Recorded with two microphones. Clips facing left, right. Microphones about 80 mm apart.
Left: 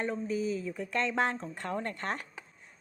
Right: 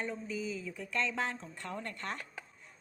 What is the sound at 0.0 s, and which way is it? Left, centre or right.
Speech, left.